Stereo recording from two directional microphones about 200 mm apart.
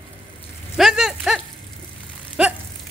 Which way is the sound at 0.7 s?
Centre (ahead or behind).